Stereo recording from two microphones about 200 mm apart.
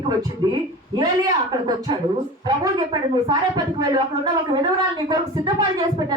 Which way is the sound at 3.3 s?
20° right (ahead or behind).